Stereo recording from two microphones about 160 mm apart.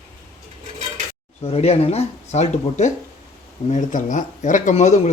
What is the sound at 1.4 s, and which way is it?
Speech, 40° left (ahead or behind).